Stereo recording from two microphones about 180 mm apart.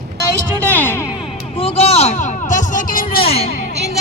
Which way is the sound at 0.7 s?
10° left (ahead or behind).